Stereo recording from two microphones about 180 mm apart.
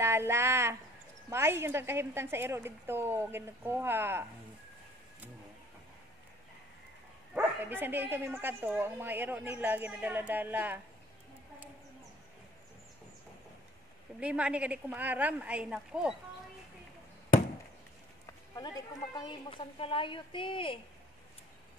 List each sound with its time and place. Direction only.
0.0 s a sound: 15° right (ahead or behind)
1.3 s speech: 15° right (ahead or behind)
7.3 s speech: 10° right (ahead or behind)
14.2 s speech: 5° right (ahead or behind)
19.1 s speech: 25° left (ahead or behind)